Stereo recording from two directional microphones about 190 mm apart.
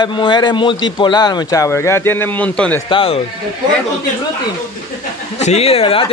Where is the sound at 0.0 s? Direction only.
25° left (ahead or behind); by 2.8 s 5° left (ahead or behind).